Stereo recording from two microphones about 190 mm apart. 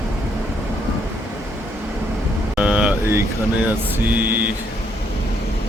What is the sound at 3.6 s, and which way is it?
Mantra, 10° right (ahead or behind).